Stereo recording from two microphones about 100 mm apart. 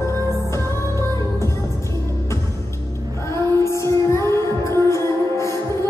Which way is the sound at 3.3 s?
30° left (ahead or behind).